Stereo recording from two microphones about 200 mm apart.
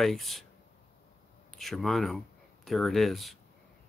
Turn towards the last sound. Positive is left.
turn(degrees=0)  # may be behind; listen again after turning